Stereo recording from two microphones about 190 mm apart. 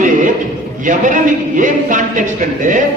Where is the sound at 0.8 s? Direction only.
45° right (ahead or behind).